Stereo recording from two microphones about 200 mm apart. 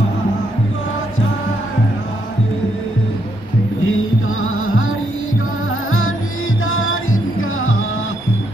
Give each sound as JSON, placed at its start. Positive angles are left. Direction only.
{"t": 3.8, "sound": "music", "side_deg": 90}
{"t": 5.9, "sound": "music", "side_deg": 90}